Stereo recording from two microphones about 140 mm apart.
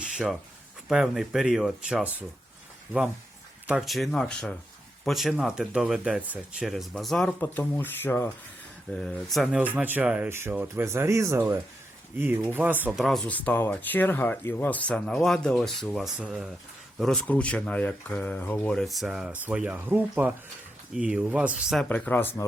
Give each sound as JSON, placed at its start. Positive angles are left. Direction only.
{"t": 0.0, "sound": "a sound", "side_deg": -5}
{"t": 0.9, "sound": "speech", "side_deg": -5}
{"t": 3.7, "sound": "speech", "side_deg": 0}
{"t": 8.9, "sound": "speech", "side_deg": 5}
{"t": 13.0, "sound": "speech", "side_deg": 5}
{"t": 21.8, "sound": "speech", "side_deg": 10}